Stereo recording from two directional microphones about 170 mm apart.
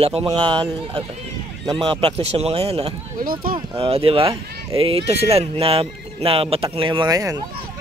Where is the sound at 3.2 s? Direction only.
55° right (ahead or behind).